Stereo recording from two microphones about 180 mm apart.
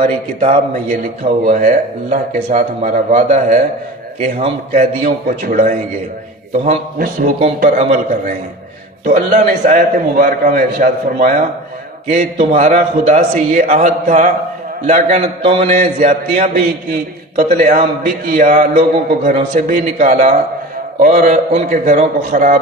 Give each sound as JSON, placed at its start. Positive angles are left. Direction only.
{"t": 0.0, "sound": "a man's voice", "side_deg": -45}
{"t": 15.7, "sound": "a man's voice", "side_deg": -45}